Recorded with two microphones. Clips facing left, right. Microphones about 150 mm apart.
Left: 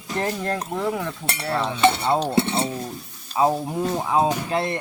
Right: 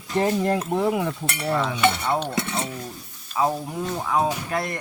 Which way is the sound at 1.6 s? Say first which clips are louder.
Left 7 dB; 30° left (ahead or behind).